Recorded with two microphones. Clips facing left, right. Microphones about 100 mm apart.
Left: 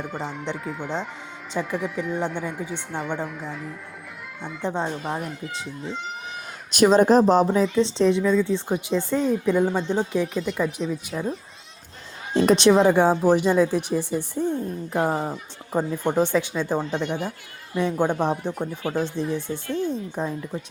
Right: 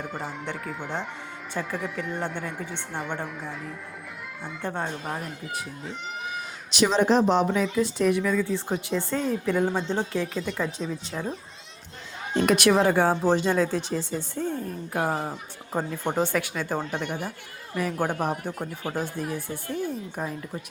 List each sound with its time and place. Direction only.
0.0 s speech: centre (ahead or behind)
4.6 s a woman's voice: 20° left (ahead or behind)
6.7 s a woman's voice: 45° left (ahead or behind); by 11.3 s 5° left (ahead or behind)
12.3 s speech: 35° left (ahead or behind)
17.1 s speech: 10° right (ahead or behind)
17.7 s a woman's voice: 25° left (ahead or behind)